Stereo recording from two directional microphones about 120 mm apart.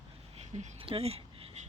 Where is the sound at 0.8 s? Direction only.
50° right (ahead or behind).